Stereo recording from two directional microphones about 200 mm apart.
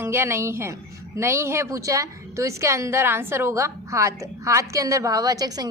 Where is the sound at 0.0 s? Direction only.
10° right (ahead or behind).